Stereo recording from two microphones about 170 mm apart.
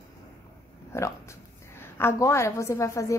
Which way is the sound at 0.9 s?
15° left (ahead or behind).